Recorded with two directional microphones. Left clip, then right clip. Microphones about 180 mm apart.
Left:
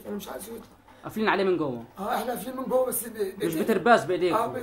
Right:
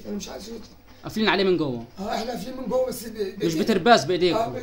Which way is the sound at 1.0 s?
15° right (ahead or behind).